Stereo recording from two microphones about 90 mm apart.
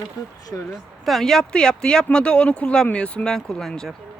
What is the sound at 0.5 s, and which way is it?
Speech, 25° left (ahead or behind).